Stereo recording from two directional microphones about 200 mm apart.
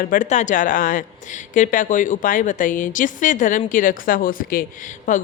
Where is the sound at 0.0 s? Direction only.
40° left (ahead or behind).